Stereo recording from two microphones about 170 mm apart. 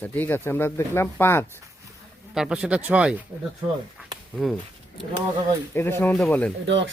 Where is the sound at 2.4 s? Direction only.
5° right (ahead or behind).